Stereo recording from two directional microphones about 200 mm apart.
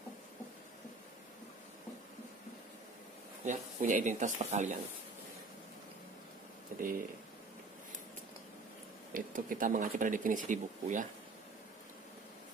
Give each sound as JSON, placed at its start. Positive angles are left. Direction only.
{"t": 3.4, "sound": "speech", "side_deg": -40}
{"t": 6.7, "sound": "a sound", "side_deg": -40}
{"t": 9.1, "sound": "speech", "side_deg": -45}